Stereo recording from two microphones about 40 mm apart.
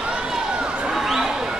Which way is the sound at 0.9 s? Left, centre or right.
Centre.